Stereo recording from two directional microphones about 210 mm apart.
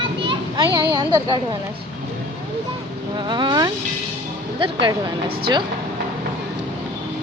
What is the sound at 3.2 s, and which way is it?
Speech, 20° right (ahead or behind).